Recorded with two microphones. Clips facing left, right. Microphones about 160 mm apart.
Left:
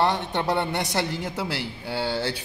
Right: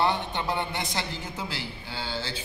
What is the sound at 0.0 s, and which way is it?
Speech, 70° left (ahead or behind).